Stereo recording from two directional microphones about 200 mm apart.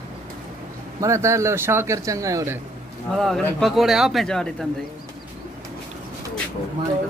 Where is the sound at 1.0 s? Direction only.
15° right (ahead or behind).